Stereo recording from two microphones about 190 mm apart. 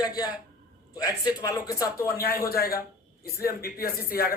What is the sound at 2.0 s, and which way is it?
A man's voice, 50° left (ahead or behind).